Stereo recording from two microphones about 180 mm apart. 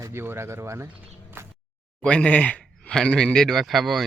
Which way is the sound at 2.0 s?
5° left (ahead or behind).